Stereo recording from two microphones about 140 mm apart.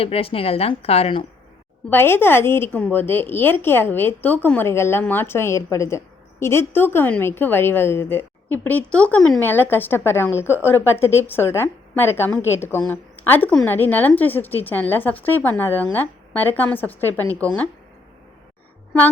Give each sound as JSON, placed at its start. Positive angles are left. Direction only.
{"t": 0.0, "sound": "speech", "side_deg": 45}
{"t": 1.9, "sound": "a woman's voice", "side_deg": 15}